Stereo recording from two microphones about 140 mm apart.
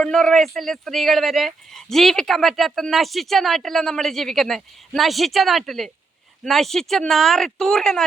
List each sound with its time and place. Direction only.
0.0 s speech: 5° left (ahead or behind)